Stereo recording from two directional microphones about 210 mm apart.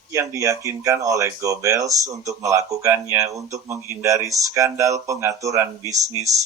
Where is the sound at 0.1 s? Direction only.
15° right (ahead or behind).